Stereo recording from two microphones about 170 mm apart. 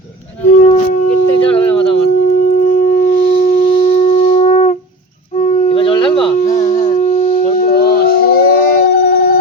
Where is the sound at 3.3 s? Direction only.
55° left (ahead or behind).